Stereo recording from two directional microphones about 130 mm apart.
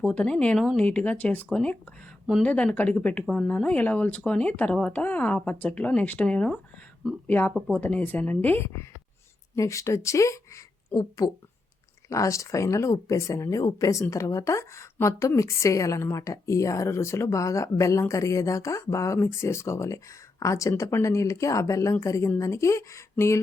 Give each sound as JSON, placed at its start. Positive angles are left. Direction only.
{"t": 0.0, "sound": "speech", "side_deg": 10}